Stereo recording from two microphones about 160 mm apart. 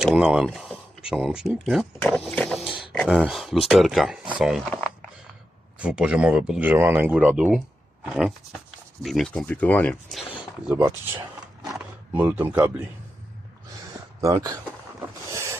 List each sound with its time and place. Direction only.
0.0 s speech: 5° right (ahead or behind)
5.8 s speech: 10° right (ahead or behind)
9.0 s speech: centre (ahead or behind)
10.8 s speech: 15° right (ahead or behind)
14.2 s speech: 20° right (ahead or behind)
15.3 s boat: 20° right (ahead or behind)